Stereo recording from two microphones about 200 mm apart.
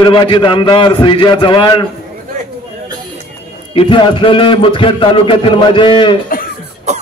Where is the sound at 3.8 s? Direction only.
25° left (ahead or behind).